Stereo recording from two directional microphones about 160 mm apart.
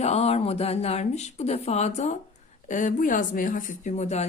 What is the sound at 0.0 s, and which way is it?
Speech, 40° left (ahead or behind).